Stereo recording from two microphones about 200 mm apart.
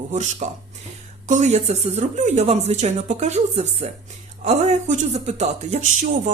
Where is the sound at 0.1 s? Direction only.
35° right (ahead or behind).